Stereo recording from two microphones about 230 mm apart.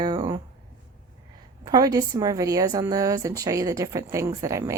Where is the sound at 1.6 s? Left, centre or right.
Centre.